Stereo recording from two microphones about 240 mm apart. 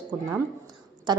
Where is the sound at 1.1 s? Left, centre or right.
Centre.